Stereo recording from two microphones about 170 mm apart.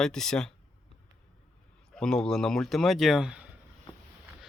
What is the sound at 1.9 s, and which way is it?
A man's voice, 5° left (ahead or behind).